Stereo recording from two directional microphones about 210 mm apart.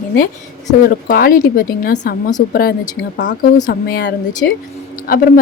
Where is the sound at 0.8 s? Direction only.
45° left (ahead or behind).